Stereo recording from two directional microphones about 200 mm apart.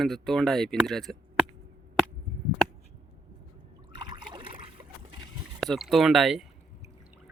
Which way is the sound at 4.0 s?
20° right (ahead or behind).